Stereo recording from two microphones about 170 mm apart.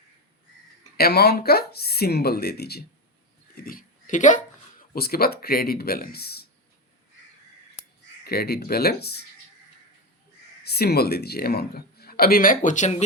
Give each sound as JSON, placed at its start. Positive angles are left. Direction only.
{"t": 0.9, "sound": "speech", "side_deg": 70}
{"t": 3.5, "sound": "a sound", "side_deg": 60}
{"t": 4.8, "sound": "speech", "side_deg": 65}
{"t": 8.2, "sound": "speech", "side_deg": 65}
{"t": 10.6, "sound": "speech", "side_deg": 70}